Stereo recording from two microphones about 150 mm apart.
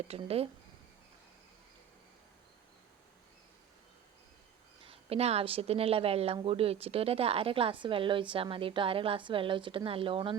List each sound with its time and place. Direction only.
0.1 s a woman's voice: 40° right (ahead or behind)
4.9 s a woman's voice: 40° right (ahead or behind)